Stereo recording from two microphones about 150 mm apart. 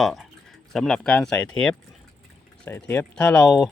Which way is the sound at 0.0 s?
Centre (ahead or behind).